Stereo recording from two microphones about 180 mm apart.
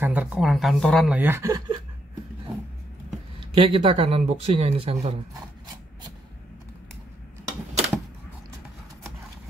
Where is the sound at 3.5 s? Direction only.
30° right (ahead or behind).